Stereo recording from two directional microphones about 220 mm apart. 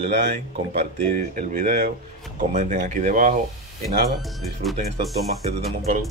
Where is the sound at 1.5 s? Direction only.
40° right (ahead or behind).